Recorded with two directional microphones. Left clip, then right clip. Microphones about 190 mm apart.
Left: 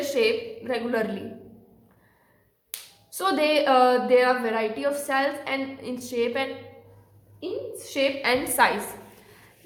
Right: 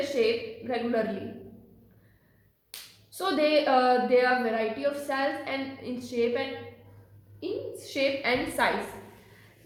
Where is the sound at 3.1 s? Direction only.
25° left (ahead or behind).